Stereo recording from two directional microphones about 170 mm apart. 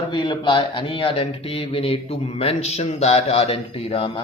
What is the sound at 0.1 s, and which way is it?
Speech, 25° left (ahead or behind).